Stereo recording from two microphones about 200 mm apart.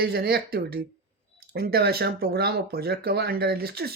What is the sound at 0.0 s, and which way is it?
Speech, 50° right (ahead or behind).